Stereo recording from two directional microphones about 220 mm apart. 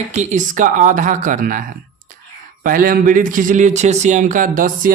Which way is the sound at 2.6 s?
40° right (ahead or behind).